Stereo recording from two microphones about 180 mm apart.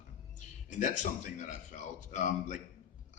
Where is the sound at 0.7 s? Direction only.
45° left (ahead or behind).